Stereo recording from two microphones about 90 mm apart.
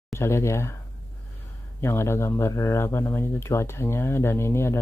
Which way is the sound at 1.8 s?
30° left (ahead or behind).